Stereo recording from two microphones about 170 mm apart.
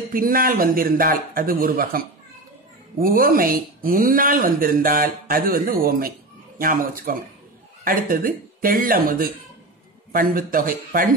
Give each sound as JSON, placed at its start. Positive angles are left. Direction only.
{"t": 0.1, "sound": "speech", "side_deg": -60}